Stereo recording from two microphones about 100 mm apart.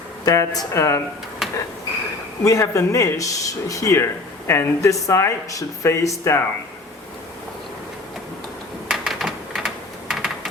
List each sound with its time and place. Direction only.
0.3 s speech: 35° left (ahead or behind)
1.4 s a sound: 5° right (ahead or behind)
2.4 s speech: 35° left (ahead or behind)
8.9 s typing: 5° right (ahead or behind)